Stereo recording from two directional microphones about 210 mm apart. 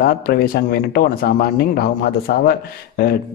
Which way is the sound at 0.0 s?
50° left (ahead or behind).